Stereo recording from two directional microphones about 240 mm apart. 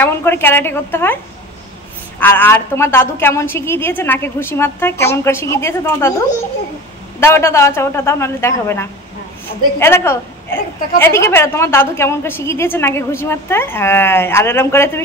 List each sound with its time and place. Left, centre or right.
0.0 s a woman's voice: centre
2.1 s a woman's voice: centre
7.2 s a woman's voice: centre